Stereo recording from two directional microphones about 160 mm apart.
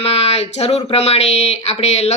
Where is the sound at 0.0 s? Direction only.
40° left (ahead or behind).